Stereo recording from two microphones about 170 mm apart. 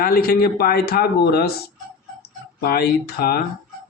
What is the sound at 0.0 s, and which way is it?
Speech, 60° left (ahead or behind).